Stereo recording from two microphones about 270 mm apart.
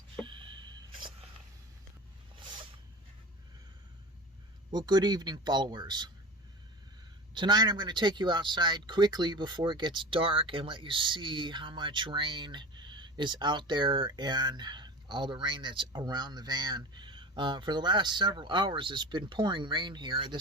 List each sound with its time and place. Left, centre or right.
0.3 s a sound: centre
4.7 s speech: centre
7.3 s speech: centre